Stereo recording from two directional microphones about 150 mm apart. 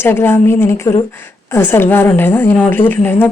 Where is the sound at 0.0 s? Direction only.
15° left (ahead or behind).